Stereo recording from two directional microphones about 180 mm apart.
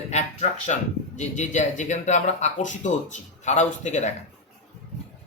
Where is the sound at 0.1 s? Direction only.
40° left (ahead or behind).